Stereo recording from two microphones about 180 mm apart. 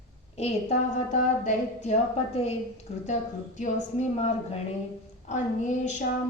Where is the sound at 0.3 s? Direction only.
35° left (ahead or behind).